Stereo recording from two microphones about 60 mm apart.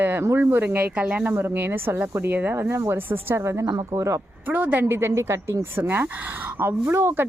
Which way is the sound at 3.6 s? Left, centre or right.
Right.